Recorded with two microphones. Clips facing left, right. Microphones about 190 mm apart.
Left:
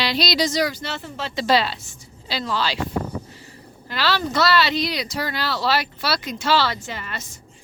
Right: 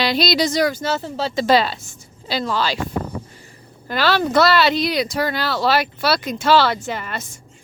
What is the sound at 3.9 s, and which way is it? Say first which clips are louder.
Speech: right 6 dB; 50° right (ahead or behind).